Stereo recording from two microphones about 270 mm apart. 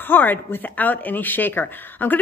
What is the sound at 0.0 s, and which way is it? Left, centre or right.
Speech, centre.